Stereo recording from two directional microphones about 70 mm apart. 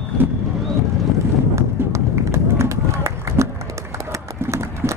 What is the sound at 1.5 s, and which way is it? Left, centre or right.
Run, right.